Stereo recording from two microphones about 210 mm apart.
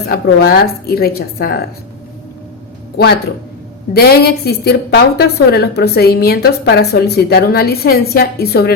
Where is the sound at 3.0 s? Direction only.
50° left (ahead or behind).